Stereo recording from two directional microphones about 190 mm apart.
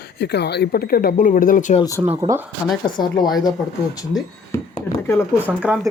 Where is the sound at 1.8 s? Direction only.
15° left (ahead or behind).